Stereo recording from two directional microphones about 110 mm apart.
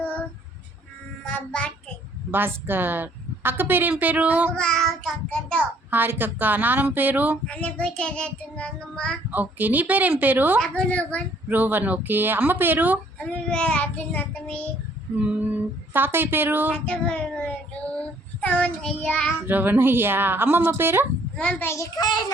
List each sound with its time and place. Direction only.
0.0 s child singing: 10° left (ahead or behind)
2.6 s speech: 20° right (ahead or behind)
4.5 s child singing: 5° left (ahead or behind)
5.9 s speech: 15° right (ahead or behind)
7.4 s child singing: 10° left (ahead or behind)
9.3 s speech: 15° right (ahead or behind)
10.6 s a woman's voice: 10° left (ahead or behind)
11.4 s speech: 15° right (ahead or behind)
13.1 s child singing: 10° left (ahead or behind)
15.1 s speech: 15° right (ahead or behind)
16.7 s child singing: 10° left (ahead or behind)
19.5 s a woman's voice: 15° right (ahead or behind)
21.3 s a woman's voice: 10° left (ahead or behind)
21.7 s a child's voice: 30° left (ahead or behind)